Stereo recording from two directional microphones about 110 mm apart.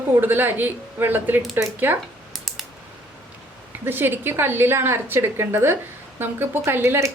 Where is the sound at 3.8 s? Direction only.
20° right (ahead or behind).